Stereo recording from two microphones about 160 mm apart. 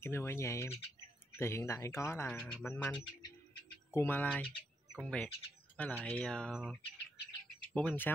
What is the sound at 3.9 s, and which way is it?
Speech, 10° left (ahead or behind).